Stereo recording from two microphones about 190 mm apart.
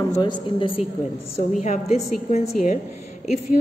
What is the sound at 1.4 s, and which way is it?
A woman's voice, 40° left (ahead or behind).